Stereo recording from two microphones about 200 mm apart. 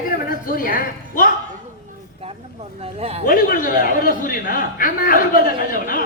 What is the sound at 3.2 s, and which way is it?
A man's voice, 45° left (ahead or behind).